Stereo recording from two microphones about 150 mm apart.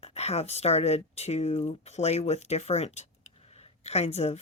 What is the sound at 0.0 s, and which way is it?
Speech, 45° left (ahead or behind).